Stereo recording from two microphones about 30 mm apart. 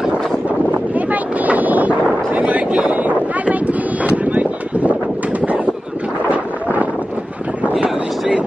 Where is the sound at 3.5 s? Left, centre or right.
Right.